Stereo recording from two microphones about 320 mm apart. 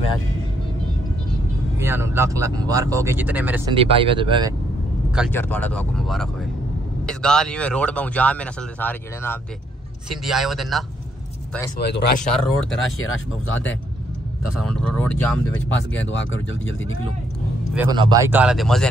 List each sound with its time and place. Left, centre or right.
1.8 s speech: centre
3.7 s speech: centre
5.1 s speech: centre
11.8 s speech: left
12.2 s speech: centre
14.6 s speech: centre
16.0 s speech: left
17.7 s speech: centre